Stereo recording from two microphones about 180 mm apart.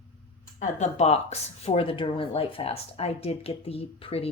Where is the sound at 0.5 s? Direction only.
40° left (ahead or behind).